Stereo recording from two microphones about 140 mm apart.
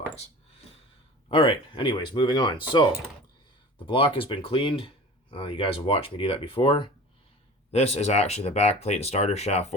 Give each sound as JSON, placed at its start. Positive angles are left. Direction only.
{"t": 1.3, "sound": "speech", "side_deg": 40}
{"t": 7.7, "sound": "speech", "side_deg": 50}